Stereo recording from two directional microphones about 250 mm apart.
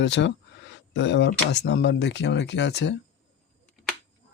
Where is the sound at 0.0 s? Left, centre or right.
Left.